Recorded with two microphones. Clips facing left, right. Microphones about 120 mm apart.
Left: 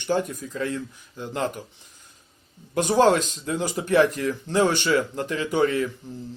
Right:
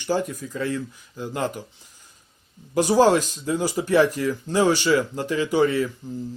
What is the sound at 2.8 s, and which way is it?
Speech, 5° right (ahead or behind).